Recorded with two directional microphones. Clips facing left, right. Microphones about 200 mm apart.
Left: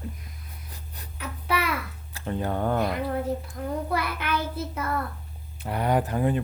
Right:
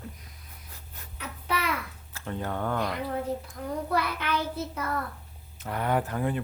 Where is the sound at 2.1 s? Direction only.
15° left (ahead or behind).